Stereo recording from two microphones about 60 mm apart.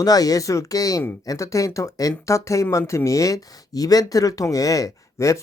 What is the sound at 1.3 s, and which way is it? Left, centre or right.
Speech, left.